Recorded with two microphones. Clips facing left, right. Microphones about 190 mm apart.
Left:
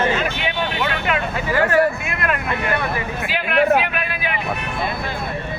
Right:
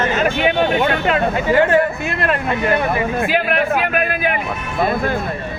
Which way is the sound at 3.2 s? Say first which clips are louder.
Left 3 dB; 45° right (ahead or behind).